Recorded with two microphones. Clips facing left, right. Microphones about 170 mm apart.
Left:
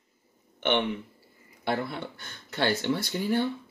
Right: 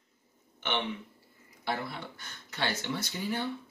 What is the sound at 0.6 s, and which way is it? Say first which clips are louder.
Speech: left 7 dB; 55° left (ahead or behind).